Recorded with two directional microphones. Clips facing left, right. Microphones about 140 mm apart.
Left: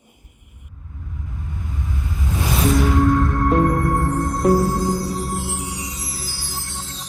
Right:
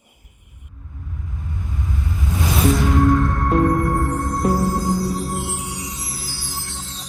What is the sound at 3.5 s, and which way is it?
Music, centre (ahead or behind).